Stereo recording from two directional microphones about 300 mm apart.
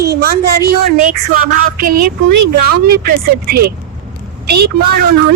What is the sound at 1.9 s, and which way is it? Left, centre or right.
Speech, right.